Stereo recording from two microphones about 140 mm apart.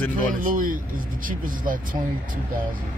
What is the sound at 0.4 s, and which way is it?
Speech, 70° right (ahead or behind).